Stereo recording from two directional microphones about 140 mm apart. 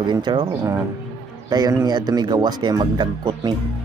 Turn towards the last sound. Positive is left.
turn(degrees=-35)  # may be behind; listen again after turning